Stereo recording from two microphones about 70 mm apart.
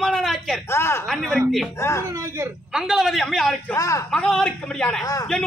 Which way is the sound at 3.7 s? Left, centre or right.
Left.